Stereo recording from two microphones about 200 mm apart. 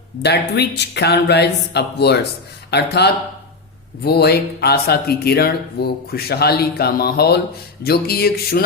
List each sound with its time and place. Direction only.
0.2 s speech: 55° left (ahead or behind)